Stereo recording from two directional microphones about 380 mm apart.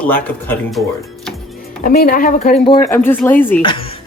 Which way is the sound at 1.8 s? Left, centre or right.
Left.